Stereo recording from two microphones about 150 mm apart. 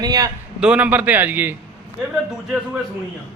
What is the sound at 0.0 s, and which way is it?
Speech, 25° right (ahead or behind).